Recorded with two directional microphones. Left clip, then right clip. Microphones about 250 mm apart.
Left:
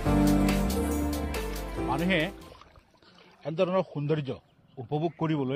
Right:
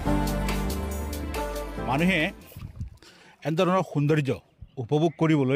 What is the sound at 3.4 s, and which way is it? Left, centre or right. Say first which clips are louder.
Speech: right 3 dB; right.